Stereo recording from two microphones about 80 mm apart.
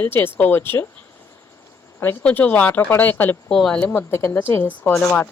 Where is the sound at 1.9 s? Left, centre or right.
Left.